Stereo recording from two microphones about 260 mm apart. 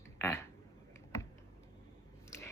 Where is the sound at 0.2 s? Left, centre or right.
Centre.